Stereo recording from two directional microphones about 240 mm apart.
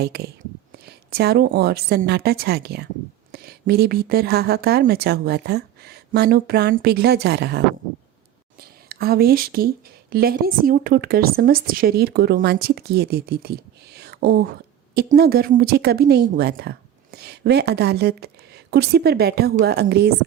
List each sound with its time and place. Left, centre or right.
0.0 s a woman's voice: right
8.9 s speech: right